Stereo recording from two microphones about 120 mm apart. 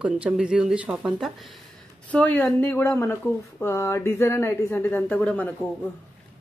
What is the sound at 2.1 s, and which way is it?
A woman's voice, 15° left (ahead or behind).